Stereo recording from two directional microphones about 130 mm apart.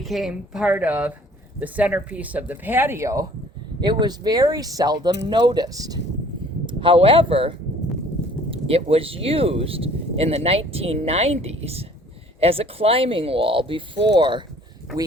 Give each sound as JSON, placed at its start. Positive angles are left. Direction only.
{"t": 0.0, "sound": "speech", "side_deg": 0}
{"t": 3.8, "sound": "speech", "side_deg": -35}
{"t": 6.7, "sound": "speech", "side_deg": -40}